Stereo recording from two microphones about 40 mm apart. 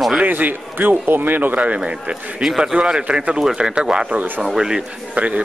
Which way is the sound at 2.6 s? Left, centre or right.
Right.